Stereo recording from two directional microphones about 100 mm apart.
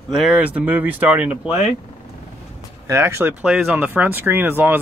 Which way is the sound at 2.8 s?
25° right (ahead or behind).